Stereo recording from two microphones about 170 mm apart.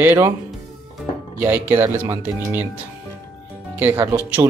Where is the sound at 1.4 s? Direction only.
15° right (ahead or behind).